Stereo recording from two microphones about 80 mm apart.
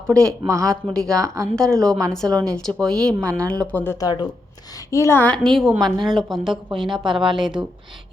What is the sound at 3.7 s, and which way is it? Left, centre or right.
Speech, left.